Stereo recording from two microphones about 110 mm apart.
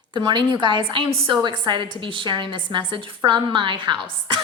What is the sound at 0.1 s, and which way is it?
A woman's voice, 45° right (ahead or behind).